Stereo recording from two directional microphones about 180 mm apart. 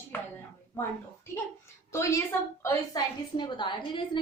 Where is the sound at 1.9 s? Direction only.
15° left (ahead or behind).